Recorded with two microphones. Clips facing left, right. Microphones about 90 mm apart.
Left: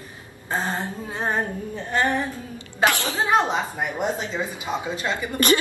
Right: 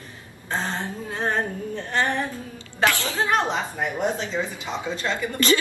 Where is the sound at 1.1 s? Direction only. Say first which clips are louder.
Even; 10° left (ahead or behind).